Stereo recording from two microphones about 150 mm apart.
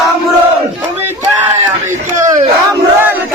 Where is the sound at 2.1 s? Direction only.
60° right (ahead or behind).